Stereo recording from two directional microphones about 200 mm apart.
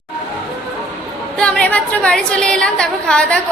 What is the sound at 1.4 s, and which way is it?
A woman's voice, 5° left (ahead or behind).